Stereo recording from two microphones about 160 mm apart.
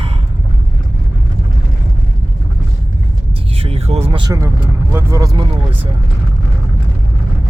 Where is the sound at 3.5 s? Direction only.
40° right (ahead or behind).